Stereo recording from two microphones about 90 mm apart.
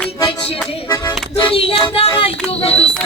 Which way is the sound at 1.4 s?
90° left.